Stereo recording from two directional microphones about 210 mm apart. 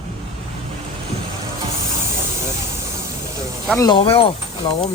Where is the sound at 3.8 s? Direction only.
20° left (ahead or behind).